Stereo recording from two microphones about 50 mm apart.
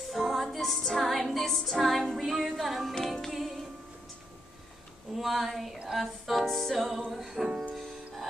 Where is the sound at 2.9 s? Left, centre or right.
Centre.